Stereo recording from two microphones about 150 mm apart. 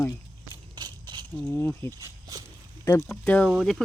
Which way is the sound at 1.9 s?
25° right (ahead or behind).